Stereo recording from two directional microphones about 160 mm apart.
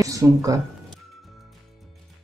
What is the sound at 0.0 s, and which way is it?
Speech, 20° right (ahead or behind).